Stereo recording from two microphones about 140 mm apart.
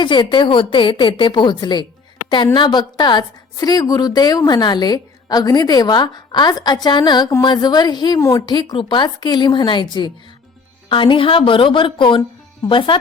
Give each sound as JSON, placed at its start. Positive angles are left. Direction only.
{"t": 0.0, "sound": "a woman's voice", "side_deg": 35}